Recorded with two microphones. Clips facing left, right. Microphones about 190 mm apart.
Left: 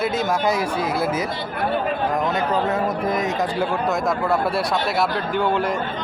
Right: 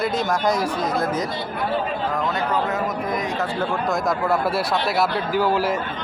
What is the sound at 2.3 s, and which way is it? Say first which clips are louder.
Speech: left 2 dB; 30° left (ahead or behind).